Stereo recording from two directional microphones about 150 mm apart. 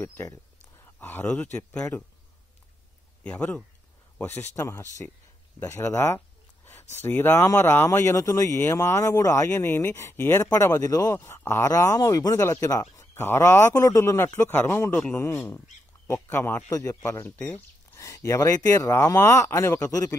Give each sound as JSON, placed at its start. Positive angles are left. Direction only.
{"t": 0.0, "sound": "speech", "side_deg": 20}
{"t": 3.3, "sound": "speech", "side_deg": 10}
{"t": 4.4, "sound": "speech", "side_deg": 20}